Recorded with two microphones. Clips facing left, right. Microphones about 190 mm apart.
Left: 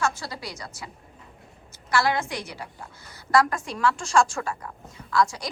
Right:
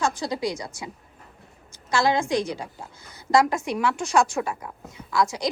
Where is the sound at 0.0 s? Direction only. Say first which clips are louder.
Right 4 dB; 15° right (ahead or behind).